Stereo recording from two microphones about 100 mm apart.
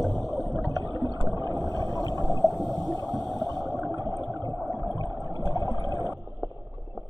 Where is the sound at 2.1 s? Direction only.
40° right (ahead or behind).